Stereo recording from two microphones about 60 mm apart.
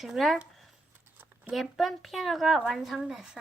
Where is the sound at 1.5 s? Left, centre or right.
Centre.